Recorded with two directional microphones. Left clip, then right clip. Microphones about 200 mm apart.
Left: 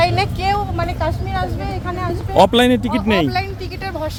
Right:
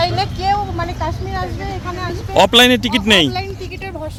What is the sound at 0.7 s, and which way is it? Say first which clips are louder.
Speech: left 1 dB; 40° left (ahead or behind).